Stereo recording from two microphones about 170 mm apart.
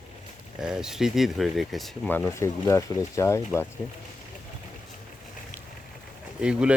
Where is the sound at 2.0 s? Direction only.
10° left (ahead or behind).